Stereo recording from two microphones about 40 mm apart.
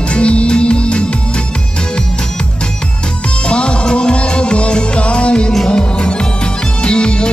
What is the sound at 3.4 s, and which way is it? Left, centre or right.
Music, left.